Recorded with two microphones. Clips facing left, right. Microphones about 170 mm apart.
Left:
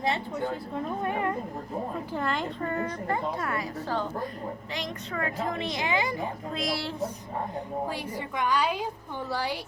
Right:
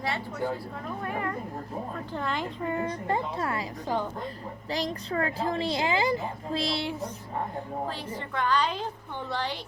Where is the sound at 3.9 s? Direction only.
15° right (ahead or behind).